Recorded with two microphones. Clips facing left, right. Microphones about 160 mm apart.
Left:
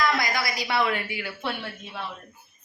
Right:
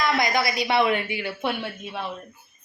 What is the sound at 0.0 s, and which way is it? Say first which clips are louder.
A woman's voice: right 3 dB; 20° right (ahead or behind).